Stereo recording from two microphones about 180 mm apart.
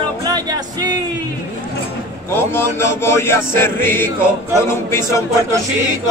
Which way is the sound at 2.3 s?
15° left (ahead or behind).